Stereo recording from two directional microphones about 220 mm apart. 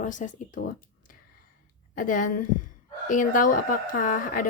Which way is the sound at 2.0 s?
35° left (ahead or behind).